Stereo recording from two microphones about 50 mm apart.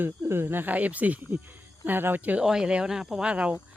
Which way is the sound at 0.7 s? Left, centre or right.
Right.